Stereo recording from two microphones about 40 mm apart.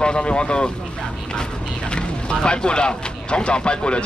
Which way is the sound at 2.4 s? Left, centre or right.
Left.